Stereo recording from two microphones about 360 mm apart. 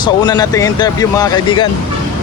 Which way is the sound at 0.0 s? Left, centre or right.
Centre.